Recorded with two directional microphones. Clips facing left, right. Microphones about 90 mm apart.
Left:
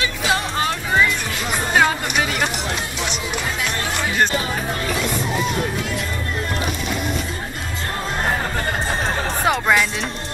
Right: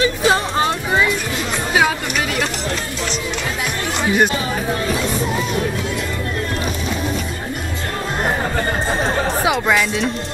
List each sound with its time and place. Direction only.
0.0 s music: 35° right (ahead or behind)
1.7 s music: 5° right (ahead or behind)
4.0 s music: 15° right (ahead or behind)
9.1 s music: centre (ahead or behind)